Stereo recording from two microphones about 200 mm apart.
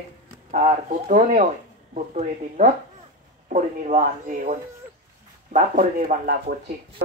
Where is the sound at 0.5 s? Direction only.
40° right (ahead or behind).